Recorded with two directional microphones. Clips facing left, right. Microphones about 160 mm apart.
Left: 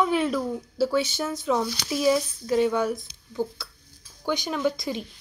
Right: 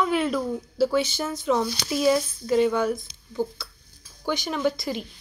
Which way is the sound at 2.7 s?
10° left (ahead or behind).